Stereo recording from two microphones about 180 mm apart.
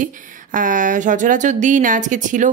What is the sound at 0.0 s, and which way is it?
A woman's voice, 50° right (ahead or behind).